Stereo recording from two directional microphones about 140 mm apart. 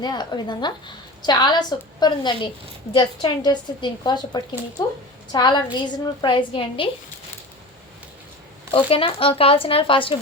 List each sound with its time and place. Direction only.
0.0 s a woman's voice: 30° left (ahead or behind)
8.7 s a woman's voice: 40° left (ahead or behind)